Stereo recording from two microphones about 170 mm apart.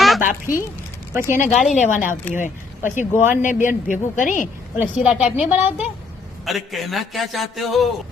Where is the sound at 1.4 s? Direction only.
45° left (ahead or behind).